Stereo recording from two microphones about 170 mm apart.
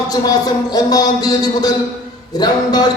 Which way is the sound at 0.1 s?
20° left (ahead or behind).